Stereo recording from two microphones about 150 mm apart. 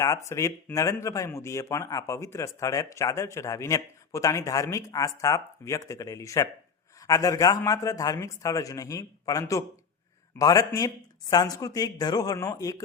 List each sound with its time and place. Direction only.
0.0 s a man's voice: 20° left (ahead or behind)